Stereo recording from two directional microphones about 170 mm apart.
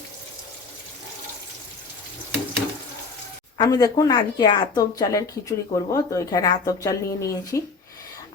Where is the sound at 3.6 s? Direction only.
25° left (ahead or behind).